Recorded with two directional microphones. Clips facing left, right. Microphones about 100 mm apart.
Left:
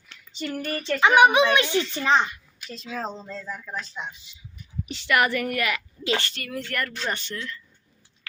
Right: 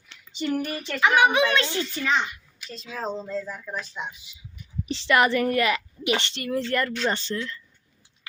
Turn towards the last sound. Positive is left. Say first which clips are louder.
# right 4 dB
turn(degrees=-30)  # may be behind; listen again after turning